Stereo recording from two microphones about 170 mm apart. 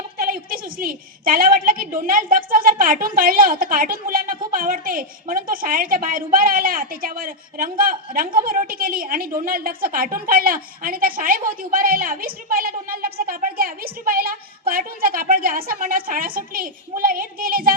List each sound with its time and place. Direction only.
0.2 s a woman's voice: 60° right (ahead or behind)